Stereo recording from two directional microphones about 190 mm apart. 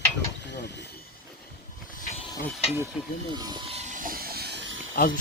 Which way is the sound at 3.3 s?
20° right (ahead or behind).